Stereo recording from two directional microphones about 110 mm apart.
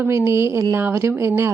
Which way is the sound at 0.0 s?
20° right (ahead or behind).